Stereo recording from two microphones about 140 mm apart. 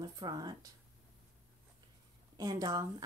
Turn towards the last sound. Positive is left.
turn(degrees=-25)  # may be behind; listen again after turning